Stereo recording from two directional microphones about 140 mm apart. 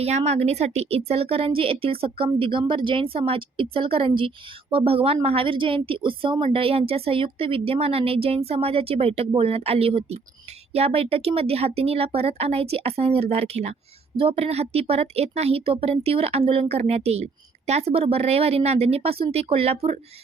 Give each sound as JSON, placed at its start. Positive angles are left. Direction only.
{"t": 0.0, "sound": "a woman's voice", "side_deg": -50}